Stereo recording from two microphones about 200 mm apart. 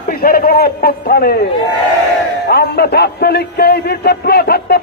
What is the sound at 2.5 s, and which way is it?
Music, 55° left (ahead or behind).